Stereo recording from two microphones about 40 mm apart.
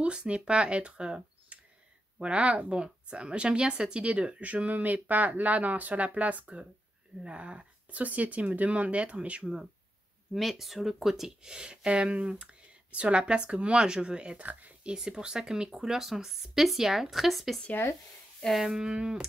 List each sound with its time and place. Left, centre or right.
0.0 s a woman's voice: right
1.5 s a sound: right
2.1 s a woman's voice: right
10.3 s speech: centre
11.2 s a woman's voice: centre
14.4 s speech: right
15.0 s speech: centre
18.7 s a woman's voice: right